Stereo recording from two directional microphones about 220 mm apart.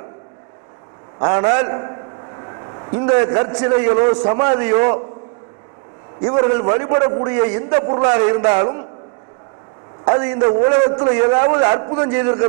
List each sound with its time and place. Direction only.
1.2 s a man's voice: 15° right (ahead or behind)
6.2 s a man's voice: 20° right (ahead or behind)
10.0 s a man's voice: 20° right (ahead or behind)